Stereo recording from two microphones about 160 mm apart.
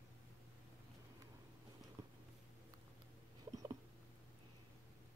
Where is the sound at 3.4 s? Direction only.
20° right (ahead or behind).